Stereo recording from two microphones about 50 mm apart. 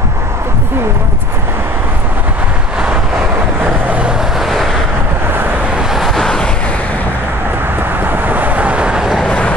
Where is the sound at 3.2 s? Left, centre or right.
Right.